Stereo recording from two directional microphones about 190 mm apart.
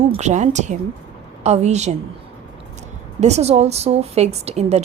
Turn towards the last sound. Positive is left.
turn(degrees=-35)  # may be behind; listen again after turning